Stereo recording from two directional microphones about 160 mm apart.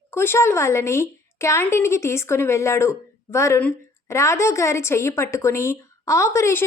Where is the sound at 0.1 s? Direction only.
15° left (ahead or behind).